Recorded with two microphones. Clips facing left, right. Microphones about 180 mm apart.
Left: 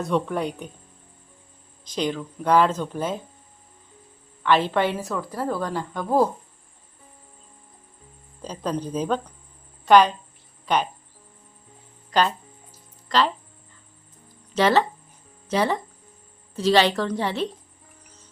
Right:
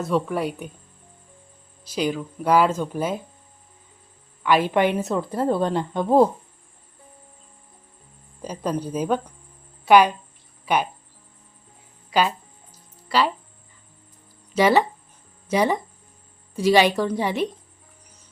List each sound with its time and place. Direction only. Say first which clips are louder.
0.0 s speech: right 1 dB; 5° right (ahead or behind)
1.8 s speech: right 2 dB; 10° right (ahead or behind)
4.4 s a woman's voice: right 2 dB; 10° right (ahead or behind)
8.4 s speech: right 1 dB; 10° right (ahead or behind)
12.1 s speech: even; 10° right (ahead or behind)
14.5 s speech: right 2 dB; 10° right (ahead or behind)